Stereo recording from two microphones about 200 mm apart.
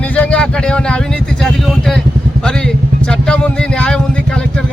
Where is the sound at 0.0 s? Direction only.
5° left (ahead or behind).